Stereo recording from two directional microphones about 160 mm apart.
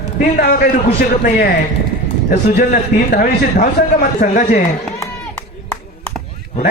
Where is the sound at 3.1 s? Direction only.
65° left (ahead or behind).